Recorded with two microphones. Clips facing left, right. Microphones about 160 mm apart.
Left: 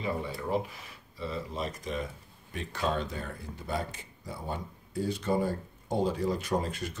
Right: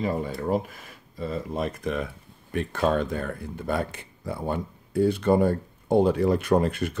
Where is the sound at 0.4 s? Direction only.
50° right (ahead or behind).